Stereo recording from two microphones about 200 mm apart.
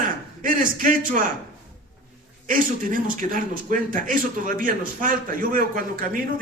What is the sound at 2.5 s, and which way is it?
A man's voice, 45° right (ahead or behind).